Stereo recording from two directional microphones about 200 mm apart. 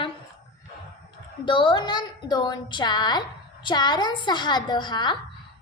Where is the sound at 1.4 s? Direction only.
25° left (ahead or behind).